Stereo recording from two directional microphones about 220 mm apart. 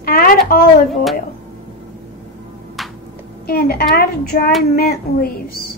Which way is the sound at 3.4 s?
45° left (ahead or behind).